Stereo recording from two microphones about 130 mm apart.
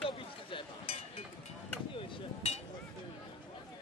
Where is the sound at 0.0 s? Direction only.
40° left (ahead or behind).